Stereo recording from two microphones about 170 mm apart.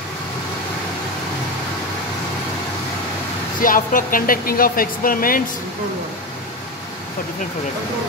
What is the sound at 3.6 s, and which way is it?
Speech, 55° left (ahead or behind).